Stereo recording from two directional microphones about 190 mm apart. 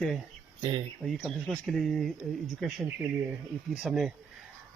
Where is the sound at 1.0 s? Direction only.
Centre (ahead or behind).